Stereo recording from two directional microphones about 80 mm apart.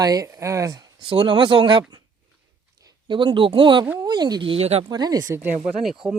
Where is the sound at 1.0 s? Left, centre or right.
Right.